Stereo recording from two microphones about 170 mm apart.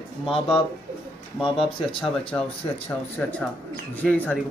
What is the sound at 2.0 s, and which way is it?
Speech, 5° left (ahead or behind).